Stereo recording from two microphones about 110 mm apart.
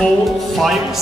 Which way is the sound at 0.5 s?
Centre (ahead or behind).